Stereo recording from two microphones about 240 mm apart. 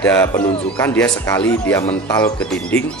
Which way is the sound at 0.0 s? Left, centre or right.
Centre.